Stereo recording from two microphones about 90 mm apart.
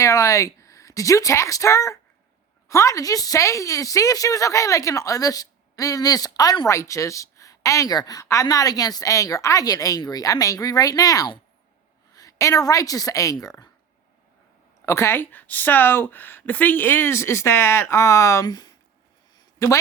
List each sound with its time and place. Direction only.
0.0 s a woman's voice: 35° left (ahead or behind)
14.8 s speech: 30° left (ahead or behind)
18.4 s speech: 45° left (ahead or behind)
19.4 s a sound: 35° left (ahead or behind)